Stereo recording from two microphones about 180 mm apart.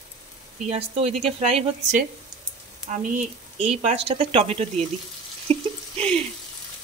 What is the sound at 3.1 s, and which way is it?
Speech, 35° right (ahead or behind).